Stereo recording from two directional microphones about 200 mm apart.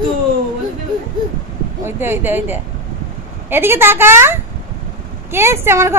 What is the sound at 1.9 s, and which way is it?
Speech, 10° right (ahead or behind).